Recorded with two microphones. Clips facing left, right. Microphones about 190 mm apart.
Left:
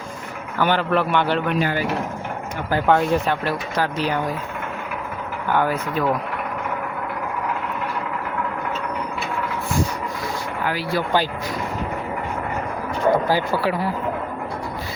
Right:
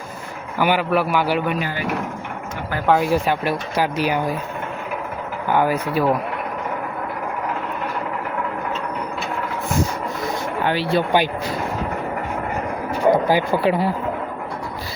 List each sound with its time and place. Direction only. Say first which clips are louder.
0.6 s speech: right 1 dB; 10° right (ahead or behind)
2.8 s speech: right 2 dB; 5° right (ahead or behind)
5.5 s speech: right 2 dB; 10° right (ahead or behind)
10.6 s speech: right 4 dB; 25° right (ahead or behind)
13.2 s speech: right 3 dB; 15° right (ahead or behind)